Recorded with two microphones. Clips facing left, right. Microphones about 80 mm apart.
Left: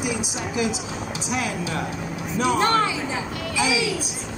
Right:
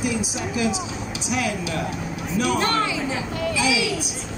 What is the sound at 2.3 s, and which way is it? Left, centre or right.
Speech, left.